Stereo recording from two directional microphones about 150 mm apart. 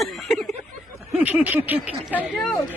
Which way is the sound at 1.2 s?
10° right (ahead or behind).